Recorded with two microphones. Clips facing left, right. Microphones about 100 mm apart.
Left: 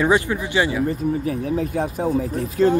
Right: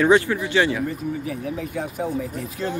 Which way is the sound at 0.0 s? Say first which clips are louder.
Right 1 dB; 15° left (ahead or behind).